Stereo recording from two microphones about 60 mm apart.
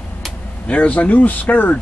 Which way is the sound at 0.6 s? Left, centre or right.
Left.